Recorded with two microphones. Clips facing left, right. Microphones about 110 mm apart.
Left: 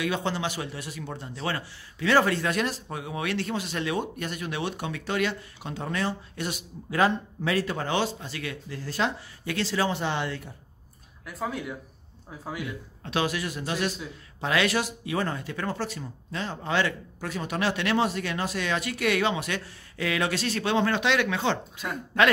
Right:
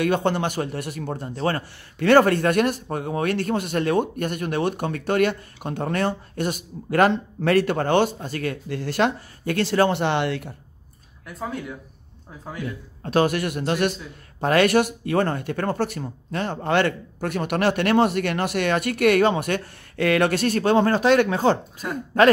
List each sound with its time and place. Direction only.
0.0 s a man's voice: 55° right (ahead or behind)
11.2 s speech: centre (ahead or behind)
13.0 s speech: 45° right (ahead or behind)